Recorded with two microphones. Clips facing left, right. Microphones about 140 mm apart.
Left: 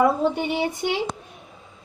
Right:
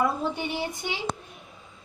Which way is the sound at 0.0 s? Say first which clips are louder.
Left 7 dB; 65° left (ahead or behind).